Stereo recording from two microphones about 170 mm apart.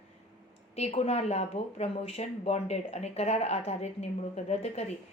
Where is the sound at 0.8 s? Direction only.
35° left (ahead or behind).